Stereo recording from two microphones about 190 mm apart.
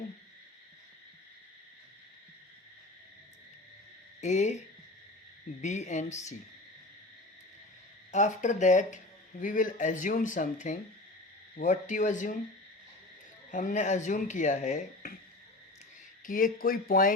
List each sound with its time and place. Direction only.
4.2 s speech: 35° left (ahead or behind)
5.6 s speech: 40° left (ahead or behind)
8.1 s speech: 40° left (ahead or behind)
13.5 s speech: 45° left (ahead or behind)
16.2 s speech: 45° left (ahead or behind)